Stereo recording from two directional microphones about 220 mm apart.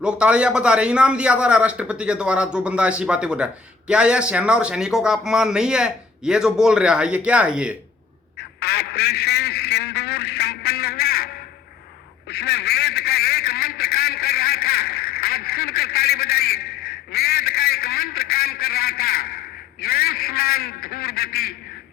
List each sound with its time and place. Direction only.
0.0 s a man's voice: 5° right (ahead or behind)
8.4 s a man's voice: 45° left (ahead or behind)